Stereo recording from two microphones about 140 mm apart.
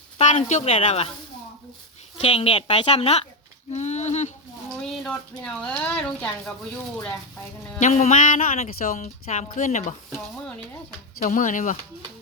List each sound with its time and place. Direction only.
0.2 s a woman's voice: 60° left (ahead or behind)
2.1 s a woman's voice: 45° left (ahead or behind)
5.0 s speech: 5° left (ahead or behind)
7.8 s speech: 60° left (ahead or behind)
11.2 s speech: 65° left (ahead or behind)